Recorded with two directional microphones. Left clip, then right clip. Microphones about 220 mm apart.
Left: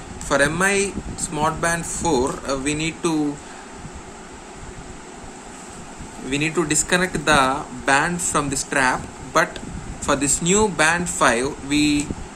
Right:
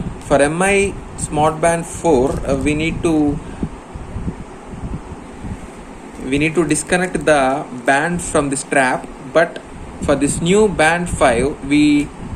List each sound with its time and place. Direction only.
0.3 s speech: 25° left (ahead or behind)
6.3 s speech: 25° left (ahead or behind)